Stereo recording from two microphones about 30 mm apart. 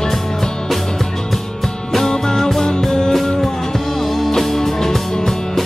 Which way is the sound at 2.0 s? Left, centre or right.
Centre.